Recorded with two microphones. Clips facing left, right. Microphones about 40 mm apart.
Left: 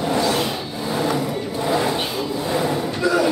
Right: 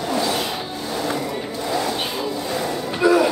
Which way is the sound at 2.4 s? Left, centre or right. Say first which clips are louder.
Left 3 dB; centre.